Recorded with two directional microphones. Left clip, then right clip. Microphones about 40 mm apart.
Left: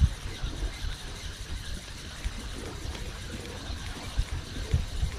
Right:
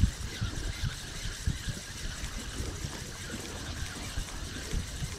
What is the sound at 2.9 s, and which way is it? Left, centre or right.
Boat, right.